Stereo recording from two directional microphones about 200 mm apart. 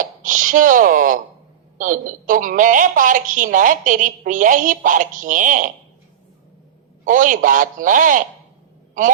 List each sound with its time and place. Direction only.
0.0 s a woman's voice: 40° right (ahead or behind)
7.0 s a woman's voice: 40° right (ahead or behind)